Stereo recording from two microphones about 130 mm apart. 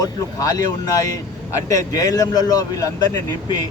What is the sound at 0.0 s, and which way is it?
Speech, 30° left (ahead or behind).